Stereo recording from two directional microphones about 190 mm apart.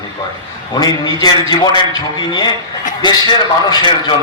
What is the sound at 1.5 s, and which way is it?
A man's voice, 20° left (ahead or behind).